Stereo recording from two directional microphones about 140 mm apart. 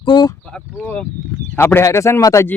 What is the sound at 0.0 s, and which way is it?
Speech, 30° left (ahead or behind).